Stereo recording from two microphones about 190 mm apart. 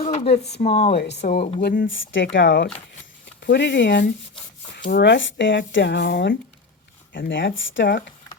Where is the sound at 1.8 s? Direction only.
80° left; by 6.4 s 65° left (ahead or behind).